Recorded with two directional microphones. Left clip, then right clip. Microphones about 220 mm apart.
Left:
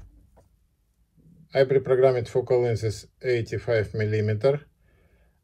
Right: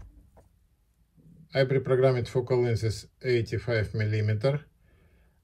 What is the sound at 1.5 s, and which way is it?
Speech, 25° right (ahead or behind).